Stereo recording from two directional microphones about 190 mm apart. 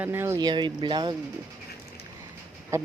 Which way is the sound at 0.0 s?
10° right (ahead or behind).